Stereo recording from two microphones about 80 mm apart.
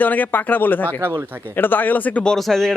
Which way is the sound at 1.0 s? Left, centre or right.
Right.